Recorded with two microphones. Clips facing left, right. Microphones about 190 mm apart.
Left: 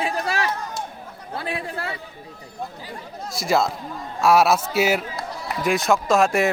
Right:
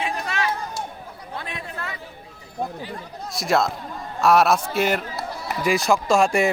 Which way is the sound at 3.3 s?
Centre (ahead or behind).